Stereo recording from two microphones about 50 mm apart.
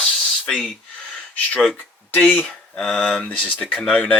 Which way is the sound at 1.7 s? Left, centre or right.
Left.